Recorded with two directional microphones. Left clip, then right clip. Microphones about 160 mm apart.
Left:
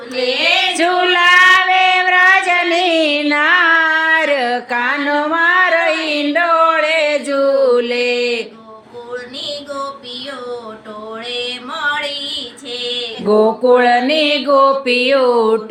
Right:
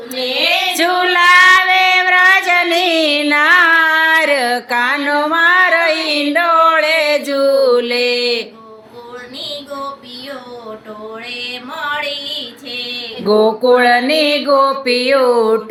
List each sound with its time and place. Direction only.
0.7 s child singing: 10° left (ahead or behind)
13.2 s music: 5° left (ahead or behind)